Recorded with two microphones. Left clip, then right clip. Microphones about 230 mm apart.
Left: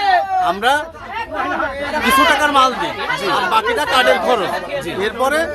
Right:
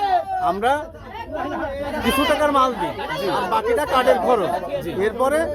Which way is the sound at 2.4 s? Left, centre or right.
Centre.